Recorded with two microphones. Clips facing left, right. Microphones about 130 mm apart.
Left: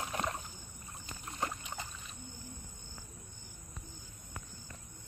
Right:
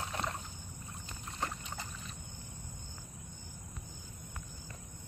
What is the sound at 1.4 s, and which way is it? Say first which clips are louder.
Boat: left 1 dB; 10° left (ahead or behind).